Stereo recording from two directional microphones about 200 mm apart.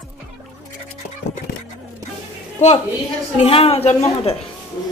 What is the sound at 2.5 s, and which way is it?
A woman's voice, 35° left (ahead or behind).